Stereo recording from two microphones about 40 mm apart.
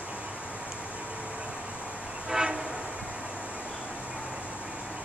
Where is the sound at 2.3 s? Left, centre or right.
Centre.